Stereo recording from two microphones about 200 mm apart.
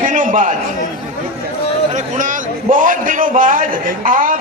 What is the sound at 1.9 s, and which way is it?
A man's voice, 40° right (ahead or behind).